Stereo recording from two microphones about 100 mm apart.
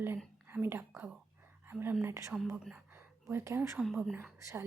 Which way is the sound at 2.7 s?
20° right (ahead or behind).